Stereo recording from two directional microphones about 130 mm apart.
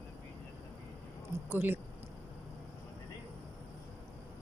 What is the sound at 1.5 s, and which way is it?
Speech, 15° right (ahead or behind).